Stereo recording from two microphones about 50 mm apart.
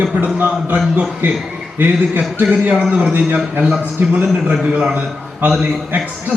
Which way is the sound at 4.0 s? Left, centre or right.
Right.